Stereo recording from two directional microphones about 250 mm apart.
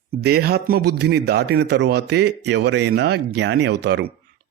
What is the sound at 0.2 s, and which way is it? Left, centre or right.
Speech, right.